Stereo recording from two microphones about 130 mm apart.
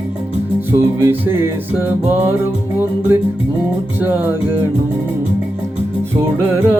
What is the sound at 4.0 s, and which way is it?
Music, 15° right (ahead or behind).